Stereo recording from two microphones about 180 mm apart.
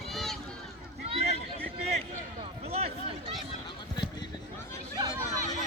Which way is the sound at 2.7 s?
35° right (ahead or behind).